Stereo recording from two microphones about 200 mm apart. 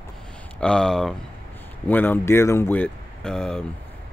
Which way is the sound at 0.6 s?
5° left (ahead or behind).